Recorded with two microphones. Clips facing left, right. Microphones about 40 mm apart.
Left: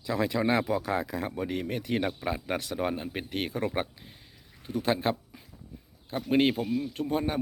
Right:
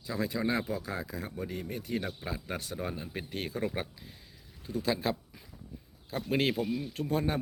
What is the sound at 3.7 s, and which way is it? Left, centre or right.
Speech, left.